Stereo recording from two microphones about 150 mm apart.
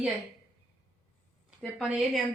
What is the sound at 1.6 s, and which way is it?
Speech, centre (ahead or behind).